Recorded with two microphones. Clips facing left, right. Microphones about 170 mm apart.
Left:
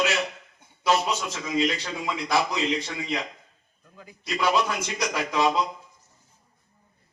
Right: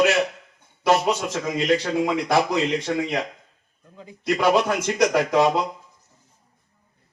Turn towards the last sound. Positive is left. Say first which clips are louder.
# right 5 dB
turn(degrees=-55)  # may be behind; listen again after turning